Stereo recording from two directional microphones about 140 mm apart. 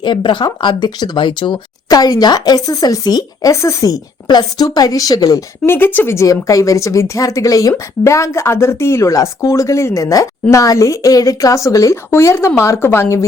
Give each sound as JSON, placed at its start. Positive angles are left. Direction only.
{"t": 0.0, "sound": "speech", "side_deg": 35}
{"t": 5.7, "sound": "speech", "side_deg": 15}